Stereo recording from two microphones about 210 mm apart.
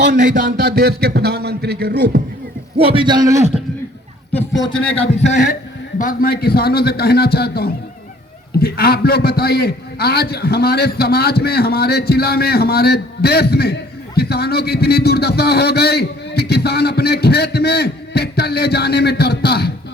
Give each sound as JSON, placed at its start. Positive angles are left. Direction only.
{"t": 0.2, "sound": "a man's voice", "side_deg": -40}
{"t": 2.7, "sound": "a man's voice", "side_deg": -25}
{"t": 4.3, "sound": "a sound", "side_deg": 10}
{"t": 4.9, "sound": "a man's voice", "side_deg": 30}